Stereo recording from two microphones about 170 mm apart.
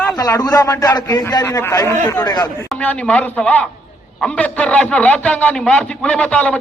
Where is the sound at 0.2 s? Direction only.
20° left (ahead or behind).